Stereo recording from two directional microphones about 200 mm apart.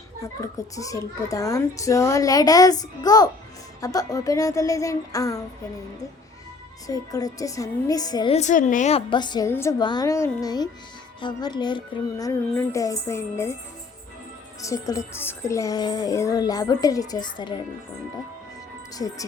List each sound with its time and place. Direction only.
0.2 s a child's voice: 15° left (ahead or behind)
6.8 s a child's voice: 20° left (ahead or behind)
8.4 s a woman's voice: 35° left (ahead or behind); by 13.5 s 15° left (ahead or behind)
14.6 s a woman's voice: 15° left (ahead or behind)
18.9 s a woman's voice: 20° left (ahead or behind)